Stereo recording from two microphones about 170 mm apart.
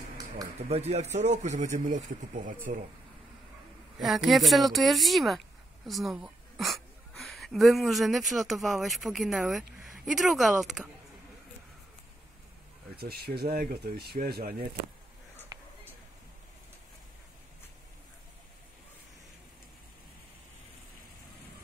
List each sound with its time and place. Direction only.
0.7 s a man's voice: 40° right (ahead or behind)
4.0 s a woman's voice: centre (ahead or behind)
12.9 s speech: 65° right (ahead or behind)
15.5 s a sound: 10° right (ahead or behind)